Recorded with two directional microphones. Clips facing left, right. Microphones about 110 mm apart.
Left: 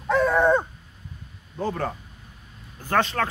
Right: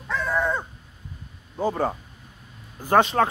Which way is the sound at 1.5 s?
10° right (ahead or behind).